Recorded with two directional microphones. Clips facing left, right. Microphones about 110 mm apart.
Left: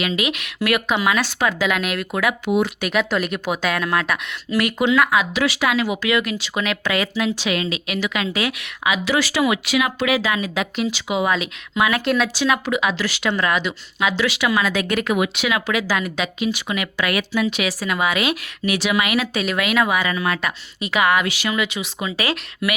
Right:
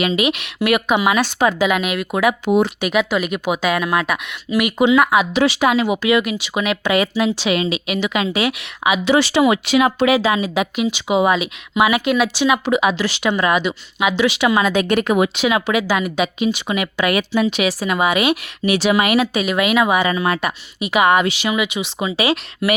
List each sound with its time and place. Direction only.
0.0 s speech: 20° right (ahead or behind)
2.5 s speech: 30° right (ahead or behind)
2.8 s speech: 10° right (ahead or behind)
22.6 s speech: 30° right (ahead or behind)